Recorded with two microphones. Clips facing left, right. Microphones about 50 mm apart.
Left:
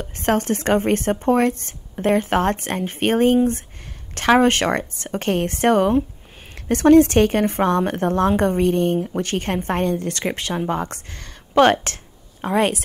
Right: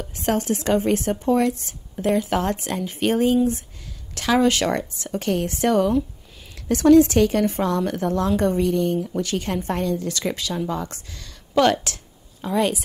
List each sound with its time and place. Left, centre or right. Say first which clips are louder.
0.0 s a woman's voice: left 3 dB; left